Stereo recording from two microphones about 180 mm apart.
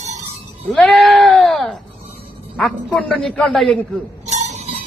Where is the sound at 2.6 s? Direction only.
5° left (ahead or behind).